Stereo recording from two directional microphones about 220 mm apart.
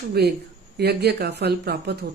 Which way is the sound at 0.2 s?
45° right (ahead or behind).